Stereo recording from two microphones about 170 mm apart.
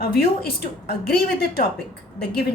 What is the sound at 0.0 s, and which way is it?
A woman's voice, 70° left (ahead or behind).